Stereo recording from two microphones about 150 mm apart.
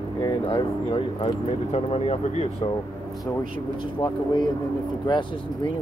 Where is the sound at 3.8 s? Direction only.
30° left (ahead or behind).